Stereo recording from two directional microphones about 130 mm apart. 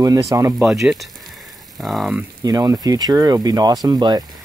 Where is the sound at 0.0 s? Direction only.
25° right (ahead or behind).